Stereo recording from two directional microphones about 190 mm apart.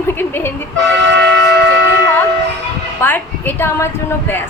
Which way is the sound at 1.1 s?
65° right (ahead or behind).